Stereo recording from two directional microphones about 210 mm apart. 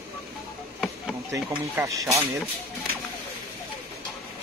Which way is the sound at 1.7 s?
15° right (ahead or behind).